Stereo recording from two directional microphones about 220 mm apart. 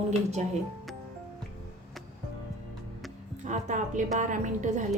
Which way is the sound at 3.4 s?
35° right (ahead or behind).